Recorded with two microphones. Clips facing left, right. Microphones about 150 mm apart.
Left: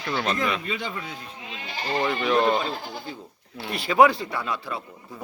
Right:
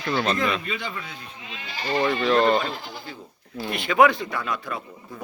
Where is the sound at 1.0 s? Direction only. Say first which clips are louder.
Left 2 dB; 40° left (ahead or behind).